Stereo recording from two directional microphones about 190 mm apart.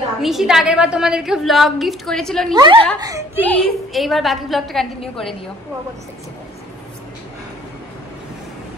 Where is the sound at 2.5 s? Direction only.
25° right (ahead or behind).